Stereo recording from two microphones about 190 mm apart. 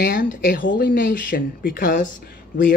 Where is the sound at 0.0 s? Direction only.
45° left (ahead or behind).